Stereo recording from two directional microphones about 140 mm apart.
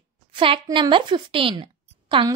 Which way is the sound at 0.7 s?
35° right (ahead or behind).